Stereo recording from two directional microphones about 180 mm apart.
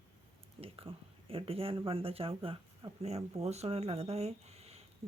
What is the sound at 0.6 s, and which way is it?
Speech, 30° right (ahead or behind).